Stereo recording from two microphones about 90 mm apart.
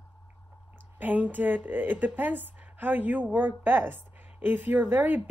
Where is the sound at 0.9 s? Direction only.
20° right (ahead or behind).